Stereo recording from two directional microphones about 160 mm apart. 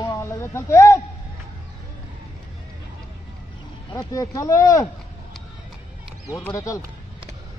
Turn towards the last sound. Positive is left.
turn(degrees=20)  # may be behind; listen again after turning